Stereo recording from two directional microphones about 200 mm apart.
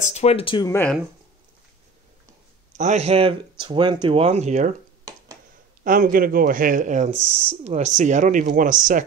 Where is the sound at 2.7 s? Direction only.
35° right (ahead or behind).